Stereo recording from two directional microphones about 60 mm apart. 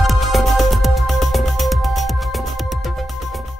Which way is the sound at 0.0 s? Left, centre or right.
Centre.